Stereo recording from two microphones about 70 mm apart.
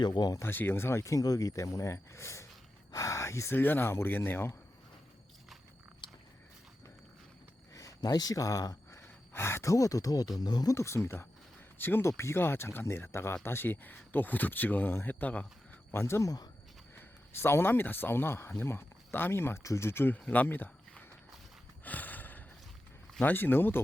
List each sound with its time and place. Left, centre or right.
0.0 s speech: left
0.4 s speech: left
3.5 s speech: left
6.0 s a sound: left
7.7 s speech: left
8.9 s speech: left
10.8 s speech: left
15.9 s speech: left
16.2 s speech: left
16.9 s speech: left
20.1 s speech: left
21.8 s a sound: left
23.2 s speech: left